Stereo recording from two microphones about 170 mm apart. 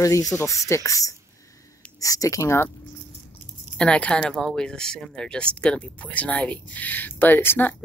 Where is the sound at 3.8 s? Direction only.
5° left (ahead or behind).